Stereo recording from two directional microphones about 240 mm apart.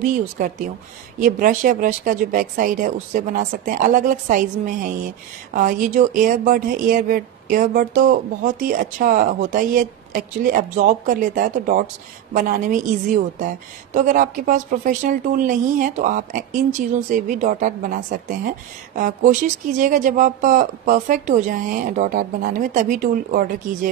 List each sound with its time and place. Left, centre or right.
1.2 s speech: right